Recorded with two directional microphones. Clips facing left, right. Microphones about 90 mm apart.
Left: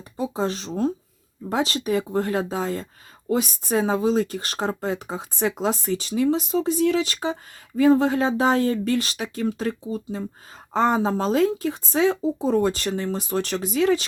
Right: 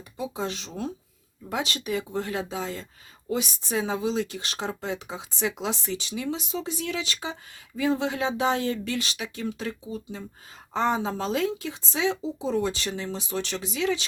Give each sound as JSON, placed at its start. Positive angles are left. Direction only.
{"t": 0.2, "sound": "speech", "side_deg": 40}